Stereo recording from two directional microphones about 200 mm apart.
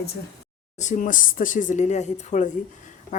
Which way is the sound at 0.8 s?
40° left (ahead or behind).